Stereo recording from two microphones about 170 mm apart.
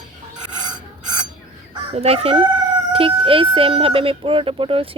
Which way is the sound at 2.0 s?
35° right (ahead or behind).